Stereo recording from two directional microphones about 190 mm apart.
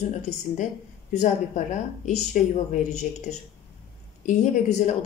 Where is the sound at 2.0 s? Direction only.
40° left (ahead or behind).